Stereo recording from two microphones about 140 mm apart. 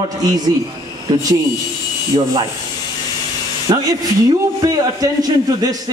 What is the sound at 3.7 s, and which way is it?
Speech, 25° right (ahead or behind).